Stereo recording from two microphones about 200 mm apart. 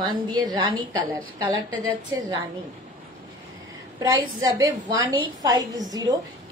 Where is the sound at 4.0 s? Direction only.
20° right (ahead or behind).